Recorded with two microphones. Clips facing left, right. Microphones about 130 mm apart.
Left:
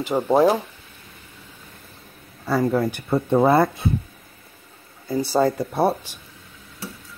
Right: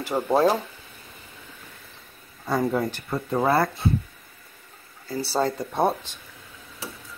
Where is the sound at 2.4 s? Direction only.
Centre (ahead or behind).